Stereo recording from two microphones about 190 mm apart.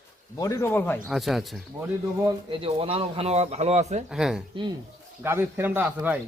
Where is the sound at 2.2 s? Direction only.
30° right (ahead or behind).